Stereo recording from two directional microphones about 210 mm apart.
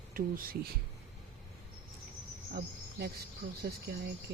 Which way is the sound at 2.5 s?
50° right (ahead or behind).